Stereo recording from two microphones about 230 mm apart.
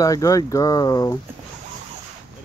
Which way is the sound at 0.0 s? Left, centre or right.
Centre.